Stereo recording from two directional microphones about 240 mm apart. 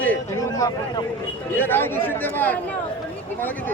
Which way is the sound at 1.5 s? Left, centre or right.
Centre.